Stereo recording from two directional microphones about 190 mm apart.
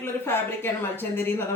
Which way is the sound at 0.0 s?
10° left (ahead or behind).